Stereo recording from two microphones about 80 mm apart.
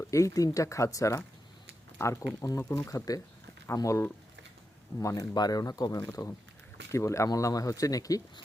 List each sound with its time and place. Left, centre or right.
0.1 s speech: left
2.4 s speech: left
5.3 s speech: left
6.1 s speech: left